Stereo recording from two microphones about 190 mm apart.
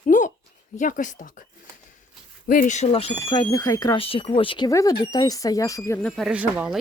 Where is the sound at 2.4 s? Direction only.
45° left (ahead or behind).